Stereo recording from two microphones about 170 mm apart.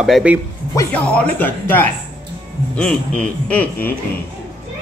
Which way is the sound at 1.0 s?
10° left (ahead or behind).